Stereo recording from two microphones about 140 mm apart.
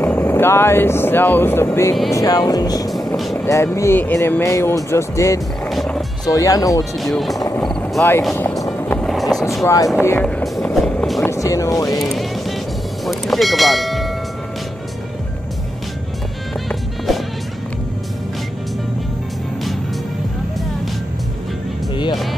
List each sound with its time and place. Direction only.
0.0 s speech: 15° left (ahead or behind)
5.7 s music: centre (ahead or behind)
6.2 s speech: 25° left (ahead or behind)
7.0 s speech: centre (ahead or behind)
8.6 s music: 15° left (ahead or behind)
9.1 s vehicle: centre (ahead or behind)
9.9 s speech: 15° left (ahead or behind)
10.4 s music: centre (ahead or behind)
11.2 s music: 25° left (ahead or behind)
12.0 s music: centre (ahead or behind)
13.0 s vehicle: centre (ahead or behind)
16.6 s music: centre (ahead or behind)